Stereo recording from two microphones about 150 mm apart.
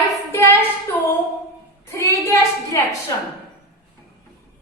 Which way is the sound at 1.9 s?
20° left (ahead or behind).